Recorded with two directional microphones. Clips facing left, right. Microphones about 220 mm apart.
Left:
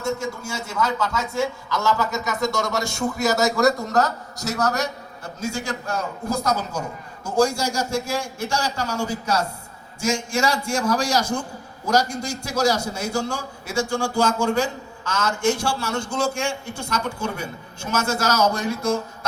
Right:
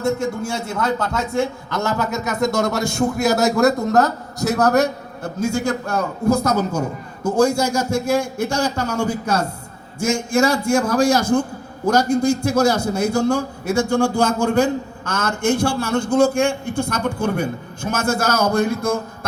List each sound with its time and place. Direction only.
0.0 s a man's voice: 55° right (ahead or behind)